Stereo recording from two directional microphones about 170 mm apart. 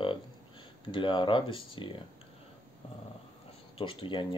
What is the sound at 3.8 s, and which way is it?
Speech, 30° left (ahead or behind).